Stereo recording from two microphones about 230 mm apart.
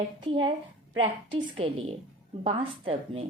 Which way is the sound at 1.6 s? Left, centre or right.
Right.